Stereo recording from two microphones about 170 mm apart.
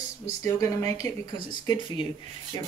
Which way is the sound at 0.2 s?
15° left (ahead or behind).